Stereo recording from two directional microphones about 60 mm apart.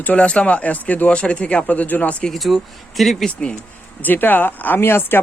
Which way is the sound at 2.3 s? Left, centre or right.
Centre.